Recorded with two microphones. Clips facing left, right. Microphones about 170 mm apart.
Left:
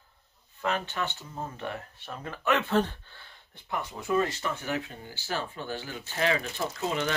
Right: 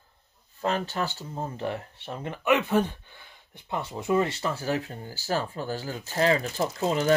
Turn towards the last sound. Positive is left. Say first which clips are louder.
# right 4 dB
turn(degrees=-35)  # may be behind; listen again after turning